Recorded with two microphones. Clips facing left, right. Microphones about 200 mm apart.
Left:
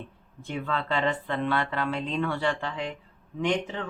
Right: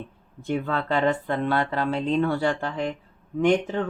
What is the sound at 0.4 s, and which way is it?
Speech, 40° right (ahead or behind).